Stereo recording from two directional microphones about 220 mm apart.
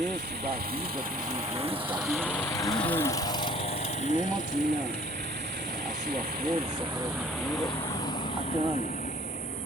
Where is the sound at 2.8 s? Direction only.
10° left (ahead or behind); by 4.6 s 35° left (ahead or behind).